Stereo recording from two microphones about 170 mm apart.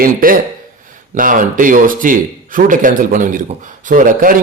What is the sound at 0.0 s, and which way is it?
A man's voice, 55° right (ahead or behind).